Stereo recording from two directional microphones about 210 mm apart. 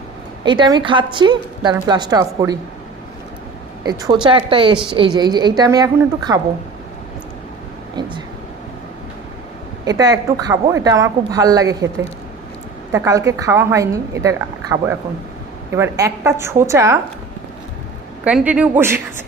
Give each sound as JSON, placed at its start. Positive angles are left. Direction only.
{"t": 0.4, "sound": "a woman's voice", "side_deg": -20}
{"t": 3.8, "sound": "a woman's voice", "side_deg": -20}
{"t": 9.8, "sound": "speech", "side_deg": -20}
{"t": 12.9, "sound": "speech", "side_deg": -15}
{"t": 18.3, "sound": "speech", "side_deg": -5}